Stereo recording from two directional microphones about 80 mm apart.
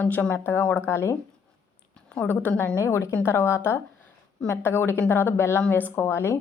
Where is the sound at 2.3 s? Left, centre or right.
Left.